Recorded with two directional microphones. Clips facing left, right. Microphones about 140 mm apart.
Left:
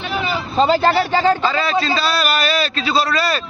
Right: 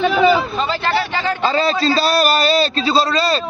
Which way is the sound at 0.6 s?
40° left (ahead or behind).